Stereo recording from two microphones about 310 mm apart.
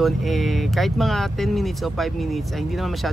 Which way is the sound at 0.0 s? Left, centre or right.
Centre.